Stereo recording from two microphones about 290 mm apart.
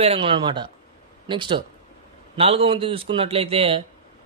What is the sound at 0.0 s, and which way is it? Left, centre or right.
A man's voice, centre.